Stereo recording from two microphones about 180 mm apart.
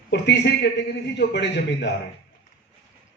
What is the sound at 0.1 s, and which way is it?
A man's voice, 70° left (ahead or behind).